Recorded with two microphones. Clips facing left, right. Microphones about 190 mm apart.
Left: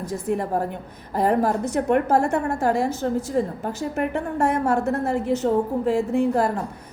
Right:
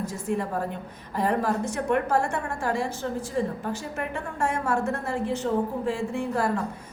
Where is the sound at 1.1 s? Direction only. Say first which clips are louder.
Left 5 dB; 40° left (ahead or behind).